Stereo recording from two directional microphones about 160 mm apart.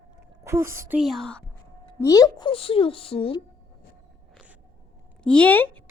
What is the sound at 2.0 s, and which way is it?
A woman's voice, 20° left (ahead or behind).